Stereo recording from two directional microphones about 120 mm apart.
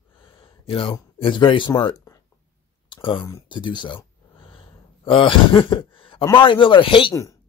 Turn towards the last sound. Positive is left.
turn(degrees=45)  # may be behind; listen again after turning